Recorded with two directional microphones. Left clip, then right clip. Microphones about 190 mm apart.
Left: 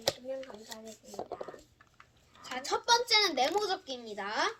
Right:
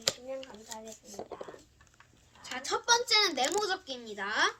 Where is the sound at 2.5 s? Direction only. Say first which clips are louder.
Even; 20° left (ahead or behind).